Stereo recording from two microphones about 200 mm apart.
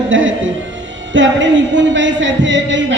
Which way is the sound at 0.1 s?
70° right (ahead or behind).